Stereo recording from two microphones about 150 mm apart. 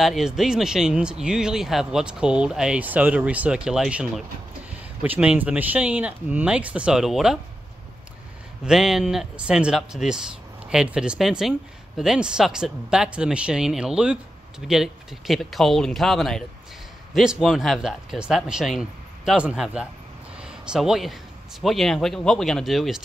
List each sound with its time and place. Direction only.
0.0 s speech: centre (ahead or behind)
8.6 s a man's voice: centre (ahead or behind)